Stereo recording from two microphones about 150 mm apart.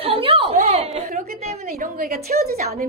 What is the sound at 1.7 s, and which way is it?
A woman's voice, 80° right.